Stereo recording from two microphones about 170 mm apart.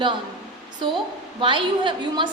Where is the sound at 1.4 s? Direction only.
30° right (ahead or behind).